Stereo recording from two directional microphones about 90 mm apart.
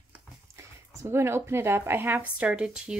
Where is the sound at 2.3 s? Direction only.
10° right (ahead or behind).